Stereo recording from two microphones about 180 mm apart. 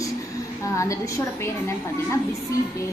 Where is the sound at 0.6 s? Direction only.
15° left (ahead or behind).